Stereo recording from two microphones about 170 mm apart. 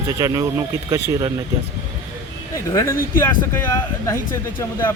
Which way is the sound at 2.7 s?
20° left (ahead or behind).